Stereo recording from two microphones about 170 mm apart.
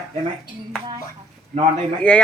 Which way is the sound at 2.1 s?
10° left (ahead or behind).